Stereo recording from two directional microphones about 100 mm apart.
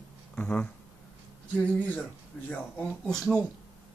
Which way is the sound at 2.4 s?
20° left (ahead or behind).